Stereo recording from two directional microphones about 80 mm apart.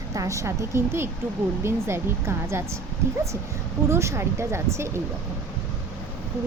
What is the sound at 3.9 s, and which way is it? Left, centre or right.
Speech, right.